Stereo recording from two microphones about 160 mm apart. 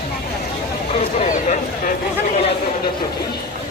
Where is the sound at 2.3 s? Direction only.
40° left (ahead or behind).